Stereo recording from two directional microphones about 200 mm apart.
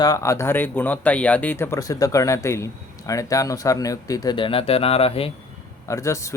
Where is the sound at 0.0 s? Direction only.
15° left (ahead or behind).